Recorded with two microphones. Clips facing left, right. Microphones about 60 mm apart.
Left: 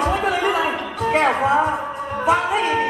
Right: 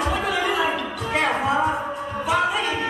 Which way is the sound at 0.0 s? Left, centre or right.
Left.